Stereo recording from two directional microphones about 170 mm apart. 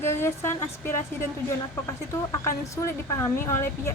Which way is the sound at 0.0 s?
15° left (ahead or behind).